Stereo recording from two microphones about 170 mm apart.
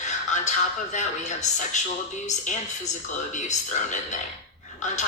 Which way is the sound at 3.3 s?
45° left (ahead or behind).